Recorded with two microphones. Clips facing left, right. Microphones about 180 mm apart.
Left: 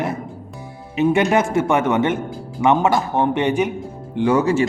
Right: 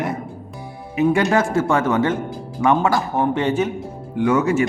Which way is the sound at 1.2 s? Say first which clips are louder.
Left 1 dB; 20° left (ahead or behind).